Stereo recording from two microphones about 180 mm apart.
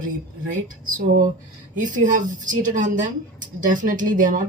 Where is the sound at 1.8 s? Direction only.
45° right (ahead or behind).